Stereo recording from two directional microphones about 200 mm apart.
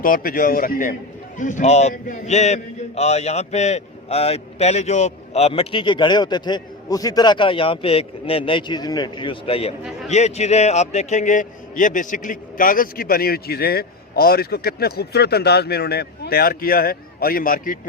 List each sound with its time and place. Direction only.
0.0 s a man's voice: 45° left (ahead or behind)